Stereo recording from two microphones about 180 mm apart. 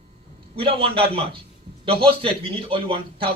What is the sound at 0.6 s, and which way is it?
A man's voice, 30° right (ahead or behind).